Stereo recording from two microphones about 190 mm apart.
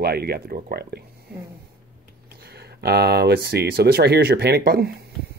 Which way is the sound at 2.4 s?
60° right (ahead or behind).